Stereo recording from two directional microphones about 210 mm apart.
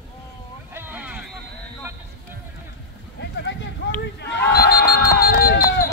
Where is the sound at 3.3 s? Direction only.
60° left (ahead or behind).